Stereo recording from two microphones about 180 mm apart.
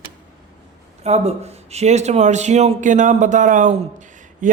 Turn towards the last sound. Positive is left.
turn(degrees=-45)  # may be behind; listen again after turning